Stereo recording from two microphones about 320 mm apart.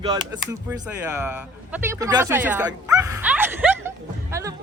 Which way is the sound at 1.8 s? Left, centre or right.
Centre.